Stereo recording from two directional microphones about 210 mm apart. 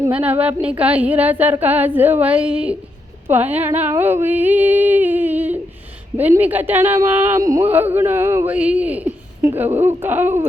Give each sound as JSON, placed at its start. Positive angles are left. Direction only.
{"t": 0.0, "sound": "speech", "side_deg": -5}